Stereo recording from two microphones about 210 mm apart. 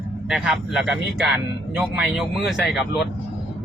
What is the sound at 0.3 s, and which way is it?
Speech, 5° right (ahead or behind).